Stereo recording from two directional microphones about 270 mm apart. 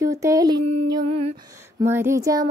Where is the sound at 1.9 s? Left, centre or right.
Centre.